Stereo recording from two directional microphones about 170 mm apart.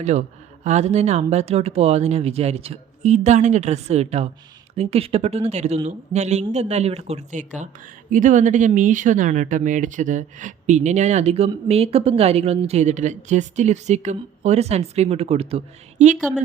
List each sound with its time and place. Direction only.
0.0 s speech: 45° right (ahead or behind)